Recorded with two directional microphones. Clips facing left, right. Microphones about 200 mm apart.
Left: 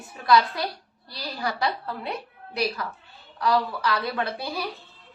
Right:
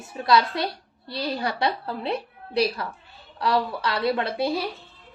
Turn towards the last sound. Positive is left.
turn(degrees=-25)  # may be behind; listen again after turning